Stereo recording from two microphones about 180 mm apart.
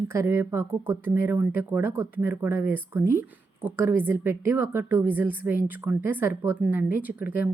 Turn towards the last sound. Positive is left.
turn(degrees=-10)  # may be behind; listen again after turning